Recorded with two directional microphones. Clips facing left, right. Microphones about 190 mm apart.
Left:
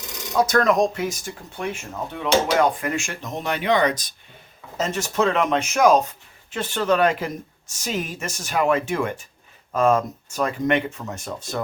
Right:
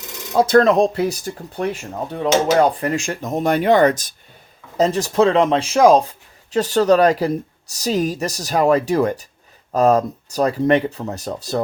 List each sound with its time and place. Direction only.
0.3 s speech: 30° right (ahead or behind); by 4.1 s 45° right (ahead or behind)
4.8 s speech: 35° right (ahead or behind)